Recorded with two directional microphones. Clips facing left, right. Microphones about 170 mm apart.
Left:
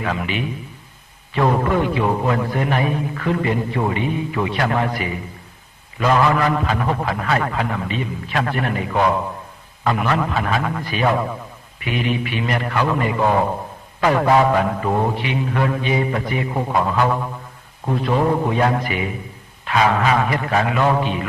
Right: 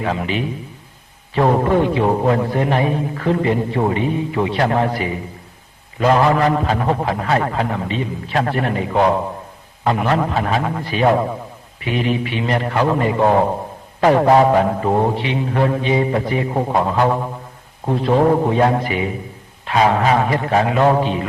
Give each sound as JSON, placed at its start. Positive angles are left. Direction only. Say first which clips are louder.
{"t": 0.0, "sound": "a man's voice", "louder": "right 3 dB", "side_deg": -30}